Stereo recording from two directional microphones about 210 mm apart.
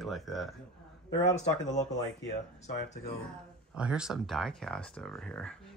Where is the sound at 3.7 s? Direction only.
5° right (ahead or behind).